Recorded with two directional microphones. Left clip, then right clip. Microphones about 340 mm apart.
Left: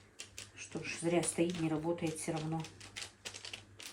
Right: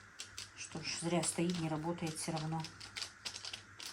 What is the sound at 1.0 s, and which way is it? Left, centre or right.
Speech, centre.